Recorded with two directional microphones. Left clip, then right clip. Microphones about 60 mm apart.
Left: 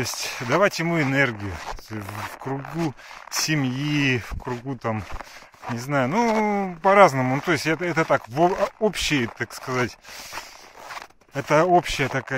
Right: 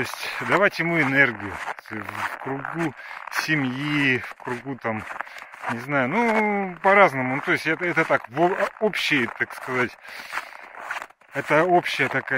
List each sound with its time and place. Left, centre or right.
0.0 s speech: left
3.3 s speech: left
7.4 s speech: left